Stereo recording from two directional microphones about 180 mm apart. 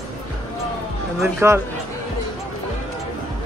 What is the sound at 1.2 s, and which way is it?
Speech, 15° right (ahead or behind).